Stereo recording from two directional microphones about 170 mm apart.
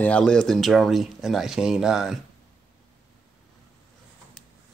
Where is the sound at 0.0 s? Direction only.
5° left (ahead or behind).